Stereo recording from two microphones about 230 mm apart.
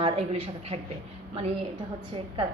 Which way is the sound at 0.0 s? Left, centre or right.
Right.